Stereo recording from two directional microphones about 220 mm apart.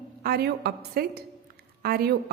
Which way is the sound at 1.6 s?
45° right (ahead or behind).